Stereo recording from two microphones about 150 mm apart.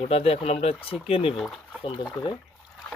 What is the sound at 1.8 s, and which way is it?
Speech, 35° left (ahead or behind).